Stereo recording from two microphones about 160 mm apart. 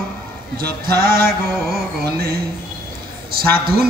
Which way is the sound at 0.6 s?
65° right (ahead or behind).